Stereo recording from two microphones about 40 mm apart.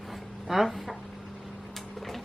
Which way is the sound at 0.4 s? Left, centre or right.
Centre.